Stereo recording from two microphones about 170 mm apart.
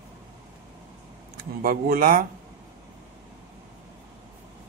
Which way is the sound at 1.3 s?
60° right (ahead or behind).